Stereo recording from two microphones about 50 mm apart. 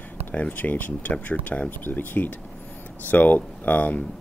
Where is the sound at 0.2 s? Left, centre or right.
Left.